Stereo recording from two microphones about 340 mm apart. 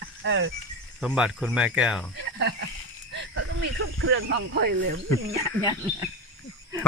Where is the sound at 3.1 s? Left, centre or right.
Right.